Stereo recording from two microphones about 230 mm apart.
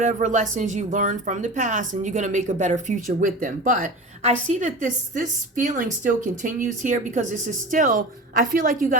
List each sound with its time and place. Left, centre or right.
0.0 s speech: right